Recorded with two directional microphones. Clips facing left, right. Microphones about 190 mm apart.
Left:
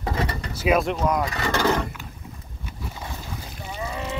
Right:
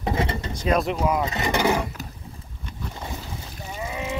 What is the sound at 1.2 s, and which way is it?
Speech, 20° right (ahead or behind).